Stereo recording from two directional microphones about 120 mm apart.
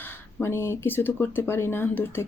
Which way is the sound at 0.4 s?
20° left (ahead or behind).